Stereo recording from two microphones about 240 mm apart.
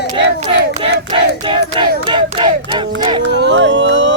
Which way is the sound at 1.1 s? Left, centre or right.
Centre.